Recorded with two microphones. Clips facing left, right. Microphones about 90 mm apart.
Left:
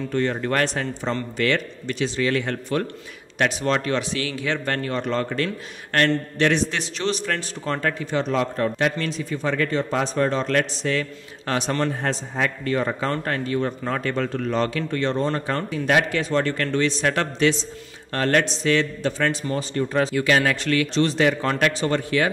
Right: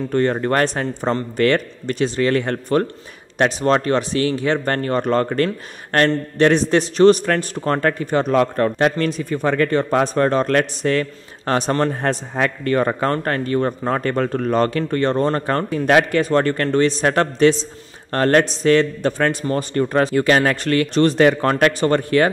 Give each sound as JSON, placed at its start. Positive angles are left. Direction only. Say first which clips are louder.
{"t": 0.1, "sound": "a man's voice", "louder": "right 5 dB", "side_deg": -45}